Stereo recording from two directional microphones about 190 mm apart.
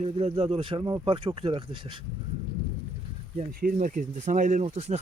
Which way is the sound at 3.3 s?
45° right (ahead or behind).